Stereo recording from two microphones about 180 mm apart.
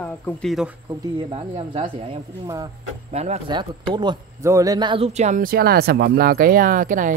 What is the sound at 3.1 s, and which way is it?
Speech, 40° right (ahead or behind).